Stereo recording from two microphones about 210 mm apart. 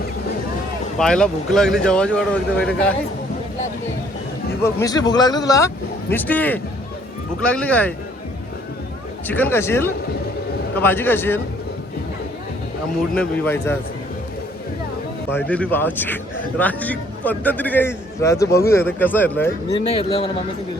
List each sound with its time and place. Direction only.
0.9 s speech: 5° left (ahead or behind)
4.6 s a man's voice: 15° left (ahead or behind)
9.2 s a man's voice: 10° left (ahead or behind)
13.1 s a man's voice: 10° left (ahead or behind)
15.3 s a man's voice: 10° left (ahead or behind)
18.4 s speech: 50° left (ahead or behind)
18.7 s a man's voice: 10° left (ahead or behind)
19.9 s a man's voice: 25° left (ahead or behind)